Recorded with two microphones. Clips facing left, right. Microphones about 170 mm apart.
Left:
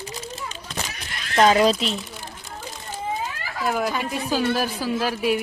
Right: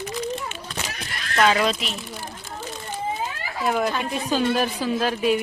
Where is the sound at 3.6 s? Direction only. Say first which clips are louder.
Right 1 dB; centre (ahead or behind).